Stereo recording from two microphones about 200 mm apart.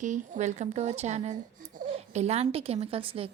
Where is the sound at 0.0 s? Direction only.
35° right (ahead or behind).